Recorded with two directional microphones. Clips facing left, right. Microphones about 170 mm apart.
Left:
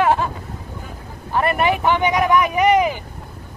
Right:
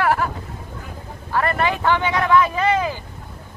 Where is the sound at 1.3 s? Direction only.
20° left (ahead or behind).